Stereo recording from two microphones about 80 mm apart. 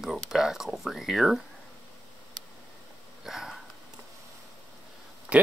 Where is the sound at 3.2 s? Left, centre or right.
Centre.